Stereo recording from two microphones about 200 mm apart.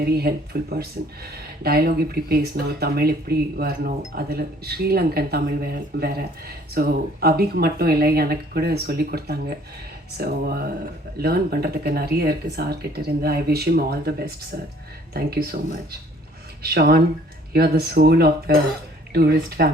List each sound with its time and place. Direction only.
0.0 s speech: 50° right (ahead or behind)
16.6 s speech: 50° right (ahead or behind)